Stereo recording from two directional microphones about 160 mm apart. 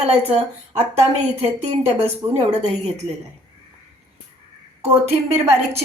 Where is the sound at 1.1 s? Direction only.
40° right (ahead or behind).